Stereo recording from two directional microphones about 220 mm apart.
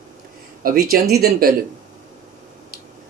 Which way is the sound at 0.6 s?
40° right (ahead or behind).